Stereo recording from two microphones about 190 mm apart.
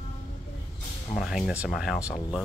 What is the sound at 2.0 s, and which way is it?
Speech, 15° left (ahead or behind).